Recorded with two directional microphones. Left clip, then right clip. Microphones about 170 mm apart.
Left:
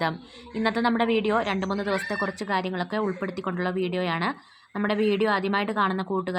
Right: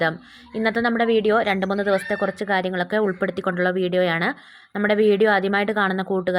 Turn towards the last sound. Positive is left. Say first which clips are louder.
# right 4 dB
turn(degrees=-20)  # may be behind; listen again after turning